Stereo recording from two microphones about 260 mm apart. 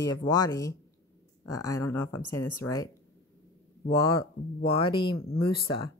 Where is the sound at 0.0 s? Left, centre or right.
Centre.